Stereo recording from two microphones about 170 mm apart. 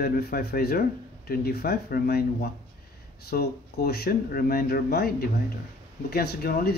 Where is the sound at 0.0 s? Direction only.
65° left (ahead or behind).